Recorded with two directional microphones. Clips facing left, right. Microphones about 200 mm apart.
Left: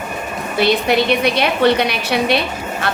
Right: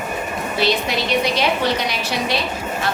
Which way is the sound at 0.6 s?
60° left (ahead or behind).